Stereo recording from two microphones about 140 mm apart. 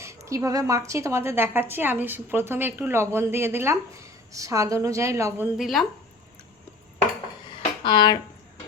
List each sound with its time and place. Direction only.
0.0 s a woman's voice: 20° right (ahead or behind)
5.5 s speech: centre (ahead or behind)
7.9 s speech: 30° left (ahead or behind)